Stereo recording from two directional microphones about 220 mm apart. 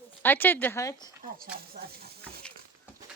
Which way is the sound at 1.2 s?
40° right (ahead or behind).